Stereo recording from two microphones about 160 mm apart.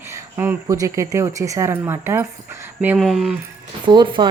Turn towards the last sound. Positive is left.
turn(degrees=-30)  # may be behind; listen again after turning